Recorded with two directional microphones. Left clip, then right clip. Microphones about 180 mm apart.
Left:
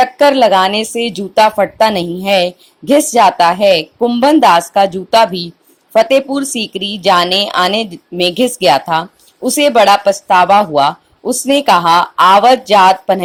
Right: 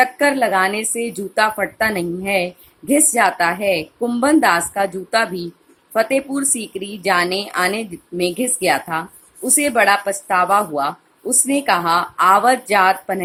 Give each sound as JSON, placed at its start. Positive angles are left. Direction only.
{"t": 0.0, "sound": "a woman's voice", "side_deg": 25}